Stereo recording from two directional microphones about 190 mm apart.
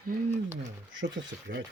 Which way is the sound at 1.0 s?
65° right (ahead or behind).